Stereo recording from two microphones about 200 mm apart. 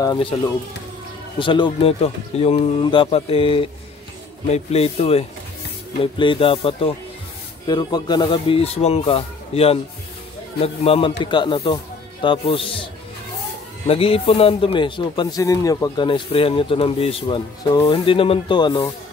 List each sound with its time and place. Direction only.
0.0 s speech: 20° left (ahead or behind)
1.4 s a man's voice: 25° left (ahead or behind)
13.8 s speech: 30° left (ahead or behind)